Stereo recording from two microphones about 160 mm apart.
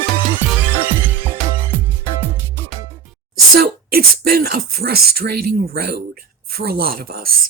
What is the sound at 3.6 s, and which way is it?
Speech, 70° right (ahead or behind).